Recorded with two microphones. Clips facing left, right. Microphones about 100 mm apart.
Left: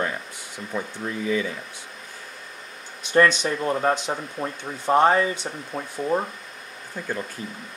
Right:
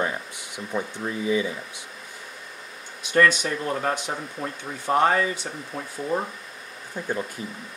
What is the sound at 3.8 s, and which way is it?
Speech, 25° left (ahead or behind).